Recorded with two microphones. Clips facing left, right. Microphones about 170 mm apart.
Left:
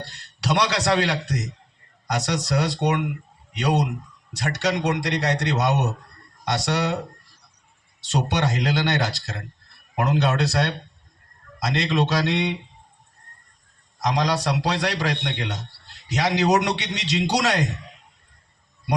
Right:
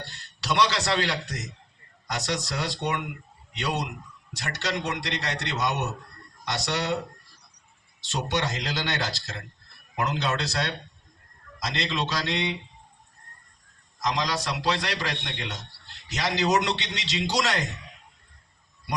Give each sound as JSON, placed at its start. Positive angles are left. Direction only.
{"t": 0.4, "sound": "a man's voice", "side_deg": 70}
{"t": 4.3, "sound": "a man's voice", "side_deg": 75}
{"t": 8.1, "sound": "speech", "side_deg": 70}
{"t": 14.0, "sound": "a man's voice", "side_deg": 65}